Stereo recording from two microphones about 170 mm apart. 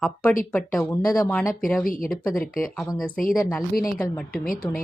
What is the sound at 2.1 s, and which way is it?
Speech, centre (ahead or behind).